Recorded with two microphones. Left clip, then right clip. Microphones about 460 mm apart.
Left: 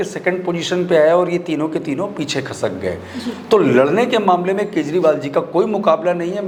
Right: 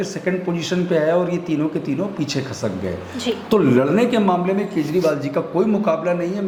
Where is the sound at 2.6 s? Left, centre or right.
Left.